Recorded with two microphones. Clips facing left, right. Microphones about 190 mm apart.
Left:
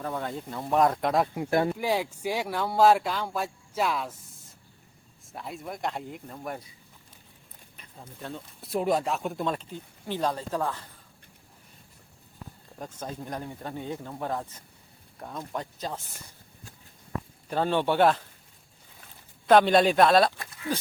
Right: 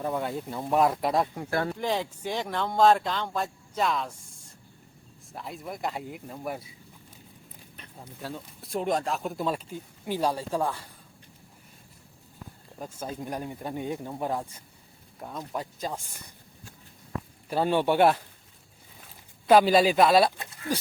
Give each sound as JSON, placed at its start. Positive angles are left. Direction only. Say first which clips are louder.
{"t": 0.0, "sound": "speech", "louder": "right 3 dB", "side_deg": -15}
{"t": 1.4, "sound": "speech", "louder": "left 3 dB", "side_deg": 15}
{"t": 5.3, "sound": "speech", "louder": "even", "side_deg": 0}
{"t": 7.9, "sound": "speech", "louder": "right 1 dB", "side_deg": -5}
{"t": 12.8, "sound": "speech", "louder": "right 1 dB", "side_deg": -10}
{"t": 17.5, "sound": "speech", "louder": "right 1 dB", "side_deg": -10}
{"t": 19.5, "sound": "speech", "louder": "even", "side_deg": -5}